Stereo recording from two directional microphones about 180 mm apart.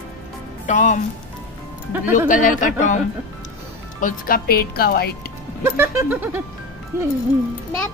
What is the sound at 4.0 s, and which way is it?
Speech, 50° left (ahead or behind).